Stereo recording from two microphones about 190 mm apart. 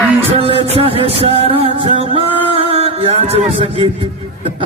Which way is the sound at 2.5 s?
30° right (ahead or behind).